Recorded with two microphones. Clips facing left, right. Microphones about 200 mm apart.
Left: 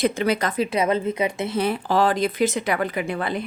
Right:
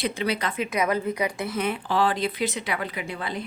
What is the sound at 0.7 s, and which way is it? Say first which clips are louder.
Speech: even; 25° left (ahead or behind).